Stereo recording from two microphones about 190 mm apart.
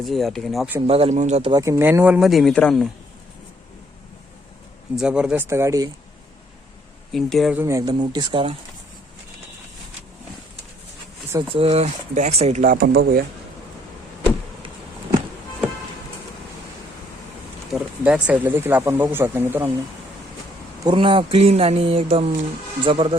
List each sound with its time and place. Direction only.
0.0 s speech: centre (ahead or behind)
0.9 s speech: 30° right (ahead or behind); by 2.9 s 5° left (ahead or behind)
4.9 s speech: 5° right (ahead or behind)
7.1 s speech: centre (ahead or behind)
7.6 s speech: 15° right (ahead or behind)
11.3 s speech: 10° right (ahead or behind)
11.5 s speech: 30° right (ahead or behind)
12.7 s a man's voice: 55° right (ahead or behind)
17.7 s speech: 5° right (ahead or behind)
20.8 s speech: 25° right (ahead or behind)